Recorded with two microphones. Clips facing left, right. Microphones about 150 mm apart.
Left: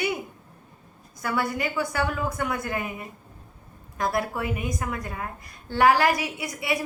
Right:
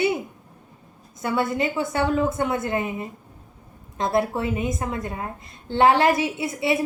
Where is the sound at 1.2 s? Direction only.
25° right (ahead or behind).